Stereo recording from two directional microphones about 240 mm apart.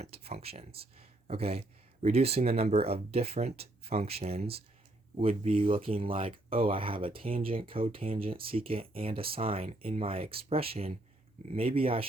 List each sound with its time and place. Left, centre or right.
0.0 s speech: right